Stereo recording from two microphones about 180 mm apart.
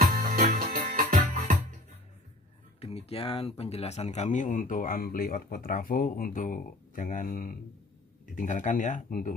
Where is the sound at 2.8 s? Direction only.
35° left (ahead or behind).